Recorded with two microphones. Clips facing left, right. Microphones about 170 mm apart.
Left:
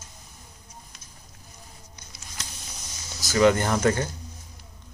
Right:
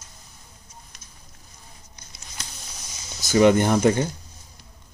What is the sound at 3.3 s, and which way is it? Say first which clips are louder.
Speech: right 3 dB; 20° right (ahead or behind).